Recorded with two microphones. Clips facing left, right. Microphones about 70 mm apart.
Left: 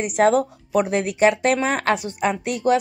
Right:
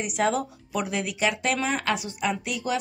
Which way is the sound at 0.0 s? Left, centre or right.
Left.